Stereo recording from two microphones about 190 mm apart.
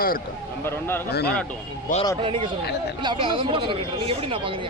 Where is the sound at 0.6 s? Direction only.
10° left (ahead or behind).